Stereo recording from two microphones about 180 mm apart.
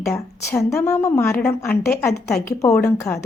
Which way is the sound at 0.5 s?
15° left (ahead or behind).